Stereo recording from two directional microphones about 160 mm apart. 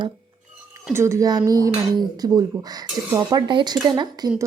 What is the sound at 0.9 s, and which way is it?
Speech, 15° right (ahead or behind).